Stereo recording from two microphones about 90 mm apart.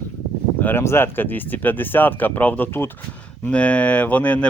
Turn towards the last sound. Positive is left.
turn(degrees=15)  # may be behind; listen again after turning